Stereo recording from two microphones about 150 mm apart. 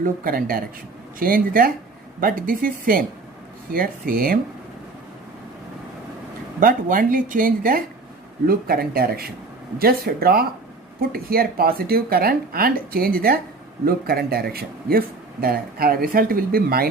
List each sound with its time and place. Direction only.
0.0 s speech: 70° right (ahead or behind)
6.6 s speech: 65° right (ahead or behind)
8.4 s speech: 80° right